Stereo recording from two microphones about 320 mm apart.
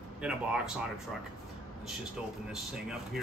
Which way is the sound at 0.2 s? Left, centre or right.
Centre.